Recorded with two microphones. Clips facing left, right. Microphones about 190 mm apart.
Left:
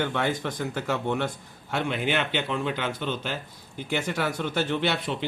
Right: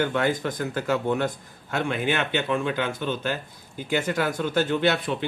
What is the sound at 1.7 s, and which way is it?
Speech, 50° right (ahead or behind).